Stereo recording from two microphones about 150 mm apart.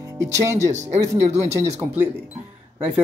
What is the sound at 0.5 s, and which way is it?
Speech, 50° right (ahead or behind).